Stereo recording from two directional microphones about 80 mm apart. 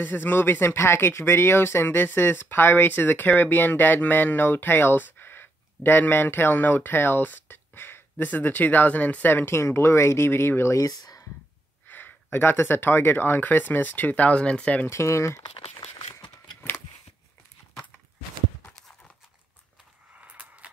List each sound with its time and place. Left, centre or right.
0.0 s speech: left
11.9 s speech: left
14.9 s speech: left
20.2 s a sound: centre